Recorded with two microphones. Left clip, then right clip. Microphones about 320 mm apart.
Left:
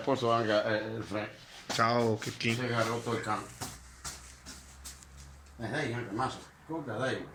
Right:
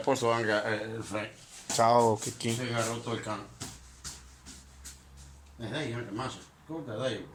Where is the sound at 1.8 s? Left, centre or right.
Right.